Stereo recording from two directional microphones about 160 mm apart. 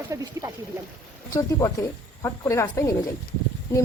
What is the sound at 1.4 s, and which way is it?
Speech, 20° left (ahead or behind).